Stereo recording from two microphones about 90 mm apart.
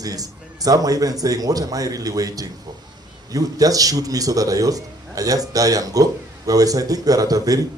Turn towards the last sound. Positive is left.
turn(degrees=-40)  # may be behind; listen again after turning